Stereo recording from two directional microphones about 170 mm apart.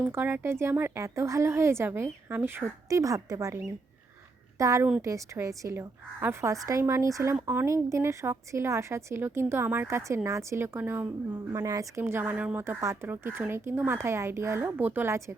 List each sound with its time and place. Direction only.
0.0 s a woman's voice: 10° right (ahead or behind)